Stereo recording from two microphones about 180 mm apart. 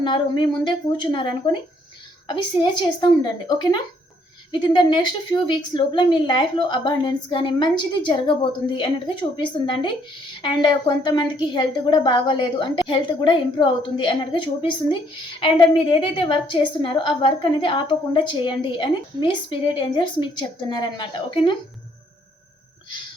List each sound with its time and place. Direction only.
0.0 s a woman's voice: 25° left (ahead or behind)